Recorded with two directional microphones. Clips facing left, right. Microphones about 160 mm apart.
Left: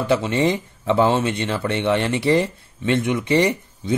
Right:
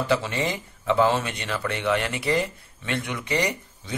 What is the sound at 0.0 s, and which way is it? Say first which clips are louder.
A man's voice: left 6 dB; 25° left (ahead or behind).